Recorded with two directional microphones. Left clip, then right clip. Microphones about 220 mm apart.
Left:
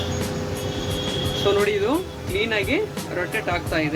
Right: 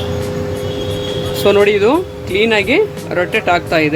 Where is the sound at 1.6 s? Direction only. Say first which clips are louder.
Right 10 dB; 45° right (ahead or behind).